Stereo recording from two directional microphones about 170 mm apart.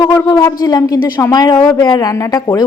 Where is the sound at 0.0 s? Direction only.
20° left (ahead or behind).